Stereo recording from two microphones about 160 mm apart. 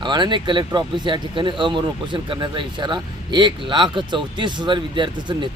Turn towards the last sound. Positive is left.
turn(degrees=-30)  # may be behind; listen again after turning